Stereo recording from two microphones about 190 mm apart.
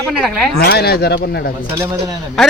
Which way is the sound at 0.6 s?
55° left (ahead or behind).